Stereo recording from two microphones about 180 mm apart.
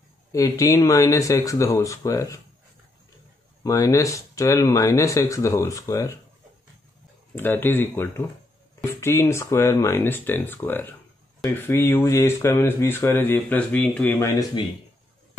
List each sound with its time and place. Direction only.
0.3 s speech: 20° left (ahead or behind)
3.6 s speech: 20° left (ahead or behind)
7.3 s speech: 10° left (ahead or behind)